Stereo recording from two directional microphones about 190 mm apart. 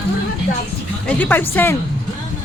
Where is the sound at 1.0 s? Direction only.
10° left (ahead or behind).